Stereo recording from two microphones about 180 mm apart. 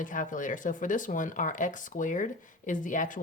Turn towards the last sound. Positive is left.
turn(degrees=45)  # may be behind; listen again after turning